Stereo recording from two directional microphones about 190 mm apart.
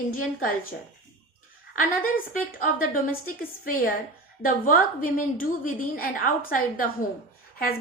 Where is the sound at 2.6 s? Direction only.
45° left (ahead or behind).